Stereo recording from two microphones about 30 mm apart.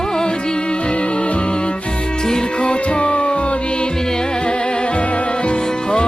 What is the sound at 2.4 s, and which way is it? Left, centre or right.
Music, left.